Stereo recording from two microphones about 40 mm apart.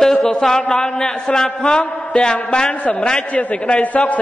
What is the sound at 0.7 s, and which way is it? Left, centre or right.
A man's voice, left.